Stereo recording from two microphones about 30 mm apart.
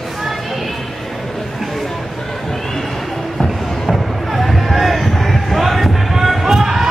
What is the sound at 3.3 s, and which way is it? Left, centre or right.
Music, centre.